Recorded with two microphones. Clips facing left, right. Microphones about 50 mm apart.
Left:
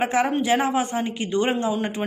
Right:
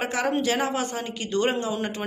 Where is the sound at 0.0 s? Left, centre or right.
Left.